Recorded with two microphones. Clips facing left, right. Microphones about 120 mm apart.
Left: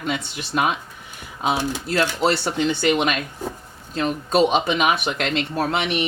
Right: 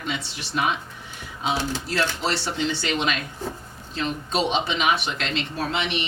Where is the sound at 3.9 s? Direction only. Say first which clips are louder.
Left 6 dB; 45° left (ahead or behind).